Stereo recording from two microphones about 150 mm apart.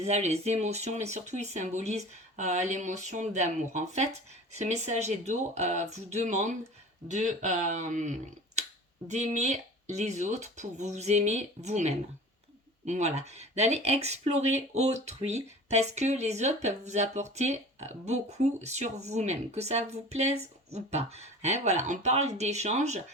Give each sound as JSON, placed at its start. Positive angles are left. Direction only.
{"t": 0.0, "sound": "speech", "side_deg": -45}